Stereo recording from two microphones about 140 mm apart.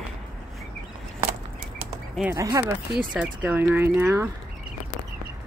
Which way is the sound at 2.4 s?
25° right (ahead or behind).